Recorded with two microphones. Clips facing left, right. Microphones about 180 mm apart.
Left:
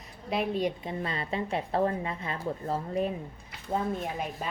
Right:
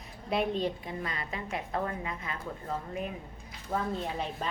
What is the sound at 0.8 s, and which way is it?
A woman's voice, 30° left (ahead or behind).